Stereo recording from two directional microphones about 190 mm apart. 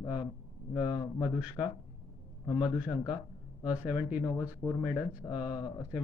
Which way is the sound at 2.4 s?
20° left (ahead or behind).